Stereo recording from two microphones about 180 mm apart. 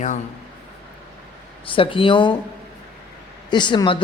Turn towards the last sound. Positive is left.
turn(degrees=25)  # may be behind; listen again after turning